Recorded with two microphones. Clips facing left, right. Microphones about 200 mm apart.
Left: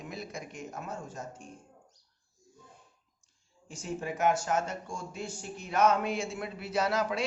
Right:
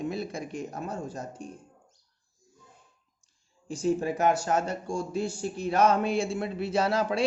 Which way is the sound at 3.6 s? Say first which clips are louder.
Right 9 dB; 35° right (ahead or behind).